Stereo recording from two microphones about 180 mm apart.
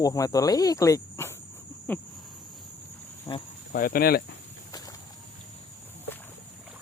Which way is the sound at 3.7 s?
55° left (ahead or behind).